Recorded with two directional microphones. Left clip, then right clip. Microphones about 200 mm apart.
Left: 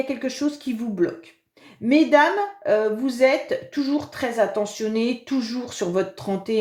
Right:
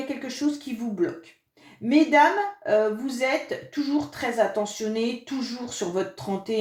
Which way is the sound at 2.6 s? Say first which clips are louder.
Left 2 dB; 40° left (ahead or behind).